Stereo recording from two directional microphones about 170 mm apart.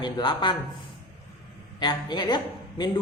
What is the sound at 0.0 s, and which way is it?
Speech, 25° left (ahead or behind).